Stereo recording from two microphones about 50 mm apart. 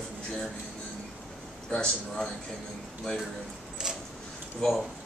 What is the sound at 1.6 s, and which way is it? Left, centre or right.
Speech, centre.